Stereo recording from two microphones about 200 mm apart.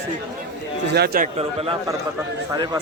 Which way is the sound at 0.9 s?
50° right (ahead or behind).